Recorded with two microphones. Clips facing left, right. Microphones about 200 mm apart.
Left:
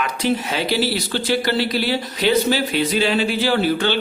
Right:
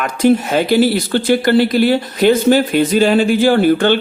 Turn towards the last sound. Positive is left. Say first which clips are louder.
# right 7 dB
turn(degrees=-50)  # may be behind; listen again after turning